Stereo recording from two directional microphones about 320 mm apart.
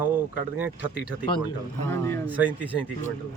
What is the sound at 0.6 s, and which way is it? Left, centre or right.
Speech, centre.